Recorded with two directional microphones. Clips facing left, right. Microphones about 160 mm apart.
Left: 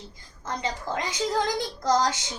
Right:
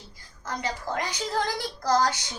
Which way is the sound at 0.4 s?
25° left (ahead or behind).